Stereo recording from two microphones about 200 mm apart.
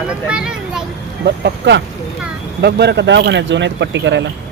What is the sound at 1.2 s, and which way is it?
Speech, 55° right (ahead or behind).